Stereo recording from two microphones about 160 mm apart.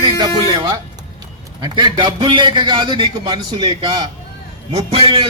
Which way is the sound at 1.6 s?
30° right (ahead or behind).